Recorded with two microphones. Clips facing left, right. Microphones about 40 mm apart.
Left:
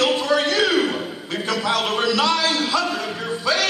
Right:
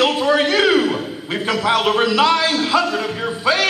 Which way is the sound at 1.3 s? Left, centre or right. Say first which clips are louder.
Right 4 dB; centre.